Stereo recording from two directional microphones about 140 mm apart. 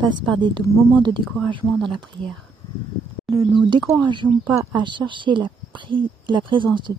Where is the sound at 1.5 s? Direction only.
35° right (ahead or behind).